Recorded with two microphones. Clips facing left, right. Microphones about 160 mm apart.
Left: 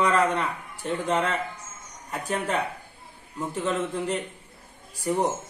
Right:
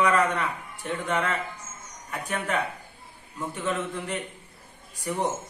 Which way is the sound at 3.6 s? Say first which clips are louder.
Left 3 dB; 25° left (ahead or behind).